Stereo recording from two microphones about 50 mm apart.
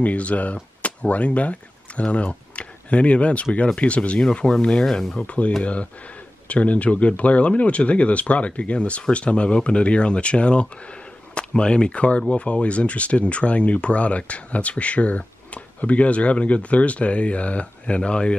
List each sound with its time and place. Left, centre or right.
0.0 s speech: left
4.6 s speech: centre
5.1 s speech: left